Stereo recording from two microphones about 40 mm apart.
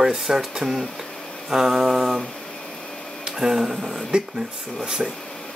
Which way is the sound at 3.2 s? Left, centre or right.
Centre.